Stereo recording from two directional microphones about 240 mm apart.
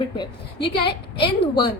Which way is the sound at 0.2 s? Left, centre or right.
Centre.